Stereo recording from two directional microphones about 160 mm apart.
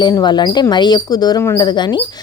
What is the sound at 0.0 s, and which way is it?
Speech, 25° left (ahead or behind).